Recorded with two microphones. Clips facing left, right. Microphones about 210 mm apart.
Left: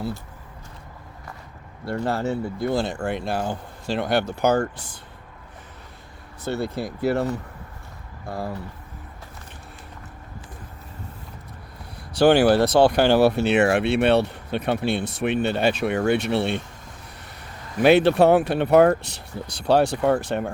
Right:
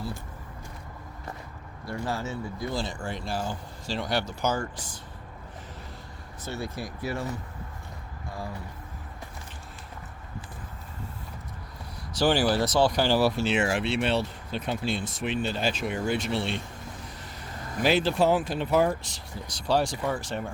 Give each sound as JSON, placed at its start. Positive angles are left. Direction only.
{"t": 1.8, "sound": "speech", "side_deg": 60}
{"t": 6.4, "sound": "speech", "side_deg": 60}
{"t": 12.2, "sound": "speech", "side_deg": 65}
{"t": 17.8, "sound": "speech", "side_deg": 60}